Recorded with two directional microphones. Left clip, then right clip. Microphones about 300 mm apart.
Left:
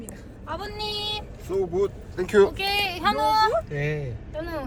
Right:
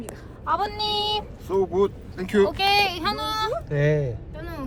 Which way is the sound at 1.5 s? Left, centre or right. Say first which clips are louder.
Right 3 dB; centre.